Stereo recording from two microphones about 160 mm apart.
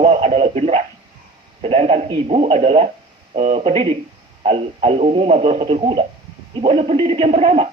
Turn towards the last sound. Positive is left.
turn(degrees=-45)  # may be behind; listen again after turning